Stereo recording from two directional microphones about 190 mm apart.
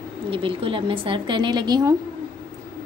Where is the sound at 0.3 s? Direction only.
30° right (ahead or behind).